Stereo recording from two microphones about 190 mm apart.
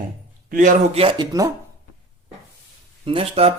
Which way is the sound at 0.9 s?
25° right (ahead or behind).